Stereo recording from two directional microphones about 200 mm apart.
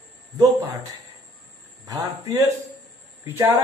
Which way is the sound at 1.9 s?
15° right (ahead or behind).